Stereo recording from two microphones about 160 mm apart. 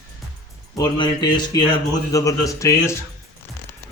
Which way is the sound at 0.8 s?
25° left (ahead or behind).